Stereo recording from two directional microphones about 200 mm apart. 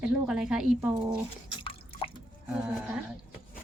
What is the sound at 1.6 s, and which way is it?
Drip, 25° left (ahead or behind).